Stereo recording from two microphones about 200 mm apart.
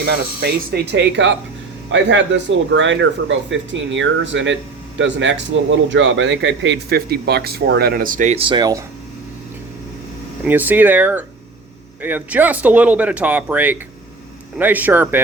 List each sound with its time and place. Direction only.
0.0 s speech: 50° right (ahead or behind); by 8.8 s 20° right (ahead or behind)
10.4 s speech: 10° right (ahead or behind)